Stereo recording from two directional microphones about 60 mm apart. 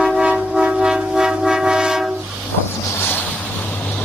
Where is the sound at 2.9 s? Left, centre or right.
Left.